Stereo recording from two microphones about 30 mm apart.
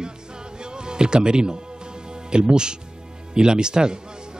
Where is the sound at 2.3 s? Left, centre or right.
Right.